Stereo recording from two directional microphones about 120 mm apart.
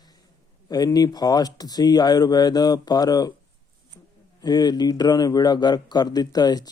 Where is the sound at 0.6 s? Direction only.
35° left (ahead or behind).